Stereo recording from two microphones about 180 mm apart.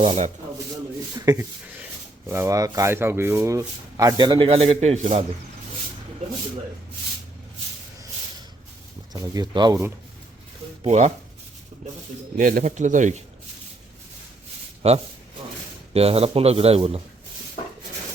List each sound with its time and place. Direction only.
0.0 s speech: 40° right (ahead or behind)
1.1 s speech: 15° right (ahead or behind); by 5.2 s 40° right (ahead or behind)
9.1 s speech: 20° right (ahead or behind)
10.8 s speech: 40° right (ahead or behind)
12.4 s speech: 45° right (ahead or behind)
14.8 s speech: 30° right (ahead or behind)